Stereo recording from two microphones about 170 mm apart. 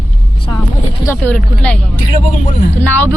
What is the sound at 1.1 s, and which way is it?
Speech, 10° left (ahead or behind).